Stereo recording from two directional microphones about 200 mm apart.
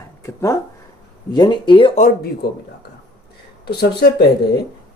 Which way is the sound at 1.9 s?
45° left (ahead or behind).